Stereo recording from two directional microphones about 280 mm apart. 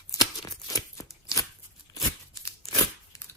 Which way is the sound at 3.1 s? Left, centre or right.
Centre.